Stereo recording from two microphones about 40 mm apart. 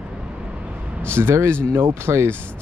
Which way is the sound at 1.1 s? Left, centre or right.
Right.